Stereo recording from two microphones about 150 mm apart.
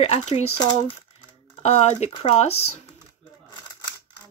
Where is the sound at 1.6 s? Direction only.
45° left (ahead or behind).